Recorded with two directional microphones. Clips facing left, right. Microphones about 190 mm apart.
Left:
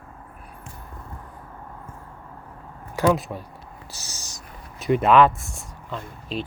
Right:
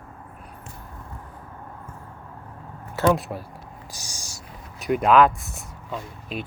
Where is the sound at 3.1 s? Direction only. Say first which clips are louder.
Even; centre (ahead or behind).